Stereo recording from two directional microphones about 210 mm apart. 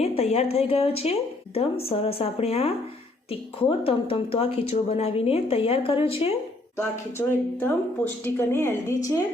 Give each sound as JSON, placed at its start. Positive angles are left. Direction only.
{"t": 0.0, "sound": "a woman's voice", "side_deg": 30}
{"t": 6.7, "sound": "speech", "side_deg": 10}